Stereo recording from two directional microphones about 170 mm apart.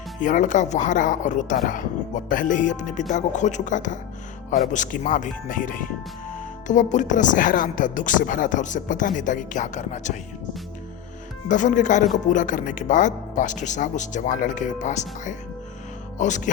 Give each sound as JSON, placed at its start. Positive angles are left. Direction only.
{"t": 0.2, "sound": "speech", "side_deg": 50}
{"t": 11.4, "sound": "speech", "side_deg": 50}